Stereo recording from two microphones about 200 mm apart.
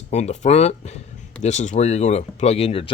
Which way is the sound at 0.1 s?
35° left (ahead or behind).